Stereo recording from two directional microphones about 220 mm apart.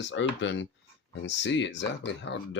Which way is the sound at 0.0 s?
55° left (ahead or behind).